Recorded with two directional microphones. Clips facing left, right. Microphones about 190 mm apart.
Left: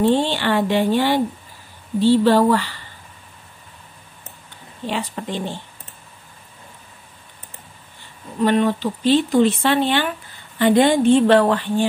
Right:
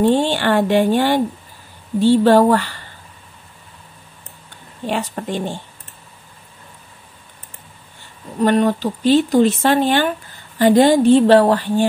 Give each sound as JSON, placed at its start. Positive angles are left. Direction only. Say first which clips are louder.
{"t": 0.0, "sound": "speech", "louder": "right 2 dB", "side_deg": -50}
{"t": 4.8, "sound": "speech", "louder": "right 3 dB", "side_deg": -45}
{"t": 8.4, "sound": "a woman's voice", "louder": "right 2 dB", "side_deg": -40}